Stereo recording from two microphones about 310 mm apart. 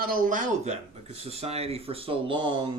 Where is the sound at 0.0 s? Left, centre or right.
Right.